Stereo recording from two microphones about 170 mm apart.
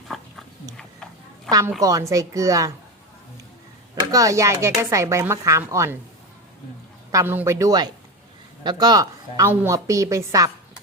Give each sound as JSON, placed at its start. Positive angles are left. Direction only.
{"t": 0.1, "sound": "a sound", "side_deg": 0}
{"t": 1.5, "sound": "a woman's voice", "side_deg": -20}
{"t": 4.1, "sound": "speech", "side_deg": -20}
{"t": 7.1, "sound": "a woman's voice", "side_deg": -15}